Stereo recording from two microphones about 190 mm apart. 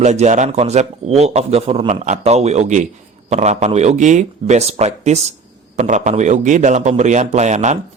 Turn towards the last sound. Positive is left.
turn(degrees=-35)  # may be behind; listen again after turning